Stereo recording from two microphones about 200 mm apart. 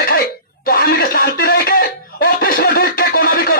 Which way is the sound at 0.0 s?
50° left (ahead or behind).